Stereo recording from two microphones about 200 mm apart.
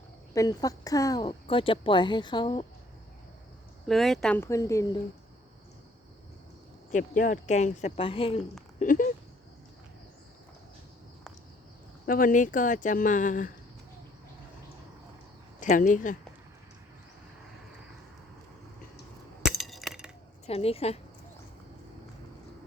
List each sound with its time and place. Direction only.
0.3 s speech: 15° left (ahead or behind)
3.8 s speech: centre (ahead or behind)
6.9 s a woman's voice: 40° left (ahead or behind)
8.8 s a sound: 40° left (ahead or behind)
12.0 s a woman's voice: 45° left (ahead or behind)
15.6 s a woman's voice: 40° left (ahead or behind)
19.4 s chink: centre (ahead or behind)
20.5 s a woman's voice: 30° left (ahead or behind)